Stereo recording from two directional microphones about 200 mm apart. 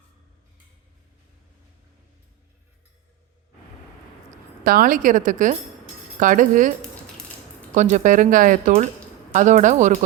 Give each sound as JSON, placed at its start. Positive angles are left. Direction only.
{"t": 4.6, "sound": "speech", "side_deg": -45}